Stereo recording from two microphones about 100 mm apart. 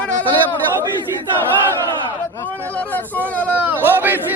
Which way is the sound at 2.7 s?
15° left (ahead or behind).